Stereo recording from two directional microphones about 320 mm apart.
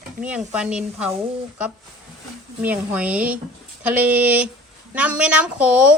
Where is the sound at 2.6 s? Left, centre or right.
Centre.